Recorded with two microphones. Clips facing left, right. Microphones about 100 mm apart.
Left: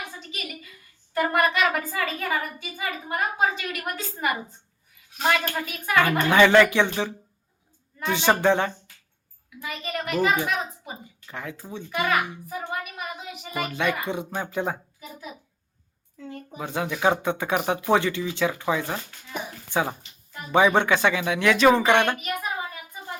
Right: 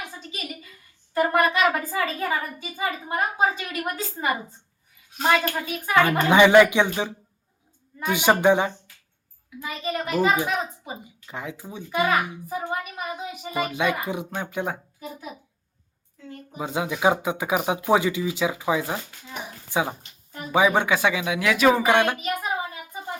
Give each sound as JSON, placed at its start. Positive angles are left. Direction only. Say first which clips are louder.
{"t": 1.1, "sound": "a woman's voice", "louder": "right 2 dB", "side_deg": -25}
{"t": 9.6, "sound": "a woman's voice", "louder": "right 3 dB", "side_deg": -25}
{"t": 12.5, "sound": "a woman's voice", "louder": "right 3 dB", "side_deg": -25}
{"t": 16.6, "sound": "speech", "louder": "right 2 dB", "side_deg": -15}